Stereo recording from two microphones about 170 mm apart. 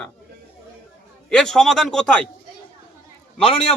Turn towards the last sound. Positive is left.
turn(degrees=30)  # may be behind; listen again after turning